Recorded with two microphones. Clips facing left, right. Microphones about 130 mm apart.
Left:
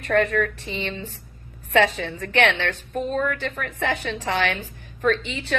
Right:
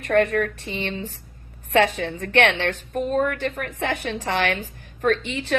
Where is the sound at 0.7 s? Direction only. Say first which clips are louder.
Right 1 dB; 40° right (ahead or behind).